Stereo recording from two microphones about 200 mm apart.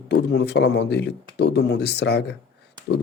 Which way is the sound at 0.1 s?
60° left (ahead or behind).